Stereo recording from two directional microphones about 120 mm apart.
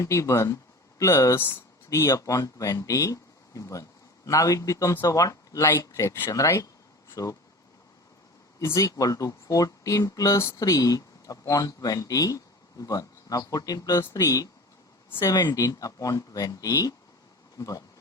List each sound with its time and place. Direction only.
0.0 s speech: 25° left (ahead or behind)
8.5 s a man's voice: 25° left (ahead or behind)